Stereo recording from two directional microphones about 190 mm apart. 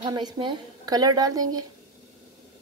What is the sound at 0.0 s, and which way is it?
A woman's voice, 20° right (ahead or behind).